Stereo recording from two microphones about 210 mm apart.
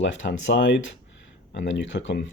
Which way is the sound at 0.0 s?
60° left (ahead or behind).